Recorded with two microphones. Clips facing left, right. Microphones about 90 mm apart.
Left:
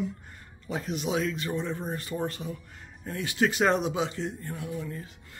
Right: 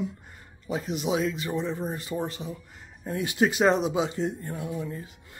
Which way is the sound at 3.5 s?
Centre (ahead or behind).